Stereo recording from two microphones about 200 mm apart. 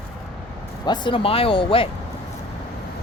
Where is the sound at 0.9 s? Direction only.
25° left (ahead or behind).